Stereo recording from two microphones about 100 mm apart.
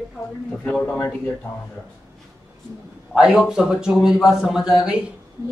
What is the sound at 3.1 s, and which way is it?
Speech, 10° right (ahead or behind).